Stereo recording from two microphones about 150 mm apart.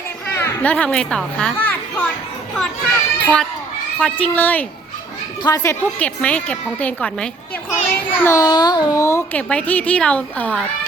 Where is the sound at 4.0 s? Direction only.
10° left (ahead or behind).